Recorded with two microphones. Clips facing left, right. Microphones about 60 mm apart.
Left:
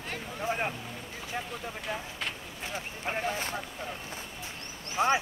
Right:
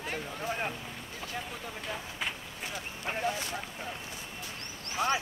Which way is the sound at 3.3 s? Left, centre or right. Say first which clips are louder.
Left 1 dB; left.